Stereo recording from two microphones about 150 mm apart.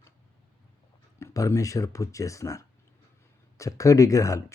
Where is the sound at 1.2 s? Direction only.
20° left (ahead or behind).